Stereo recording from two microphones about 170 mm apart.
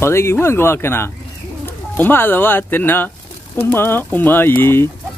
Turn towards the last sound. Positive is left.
turn(degrees=15)  # may be behind; listen again after turning